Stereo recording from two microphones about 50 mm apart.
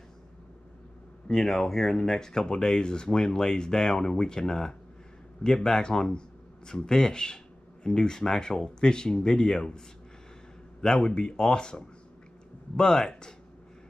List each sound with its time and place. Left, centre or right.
1.2 s speech: centre